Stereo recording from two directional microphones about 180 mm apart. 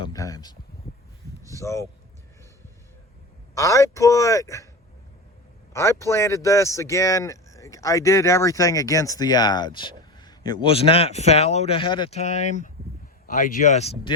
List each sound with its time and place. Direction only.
0.0 s speech: 20° left (ahead or behind)
1.5 s a man's voice: 15° left (ahead or behind)
3.5 s a man's voice: 15° left (ahead or behind)
5.7 s speech: 15° left (ahead or behind)
12.4 s speech: 45° left (ahead or behind)